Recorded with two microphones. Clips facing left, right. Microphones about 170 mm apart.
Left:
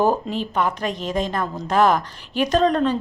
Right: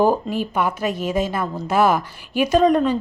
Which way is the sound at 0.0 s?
10° right (ahead or behind).